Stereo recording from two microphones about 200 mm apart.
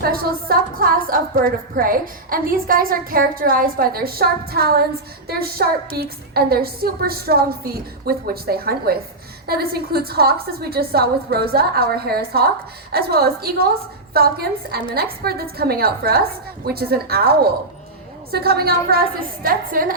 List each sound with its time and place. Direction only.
0.0 s a woman's voice: 45° right (ahead or behind)